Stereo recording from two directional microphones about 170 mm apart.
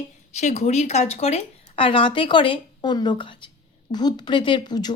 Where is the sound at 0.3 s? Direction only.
40° left (ahead or behind).